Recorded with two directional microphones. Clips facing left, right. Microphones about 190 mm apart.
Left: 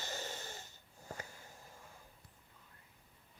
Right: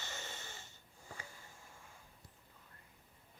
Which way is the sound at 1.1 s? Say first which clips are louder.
Left 5 dB; 45° left (ahead or behind).